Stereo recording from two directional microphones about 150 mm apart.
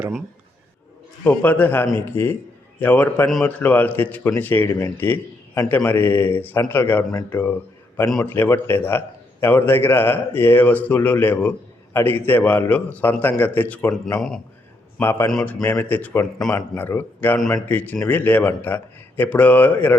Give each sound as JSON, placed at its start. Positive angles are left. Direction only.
{"t": 1.2, "sound": "a man's voice", "side_deg": 10}
{"t": 14.9, "sound": "a man's voice", "side_deg": 15}
{"t": 15.3, "sound": "a man's voice", "side_deg": 5}